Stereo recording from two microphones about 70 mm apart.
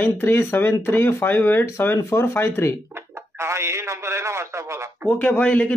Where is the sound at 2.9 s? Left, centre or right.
Right.